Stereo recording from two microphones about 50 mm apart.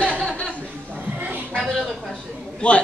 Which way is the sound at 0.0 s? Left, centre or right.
Left.